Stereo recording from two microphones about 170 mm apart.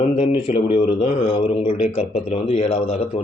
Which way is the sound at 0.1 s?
30° left (ahead or behind).